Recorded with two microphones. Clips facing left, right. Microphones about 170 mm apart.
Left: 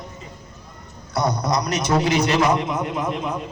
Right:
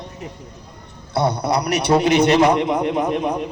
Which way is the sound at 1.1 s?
30° right (ahead or behind).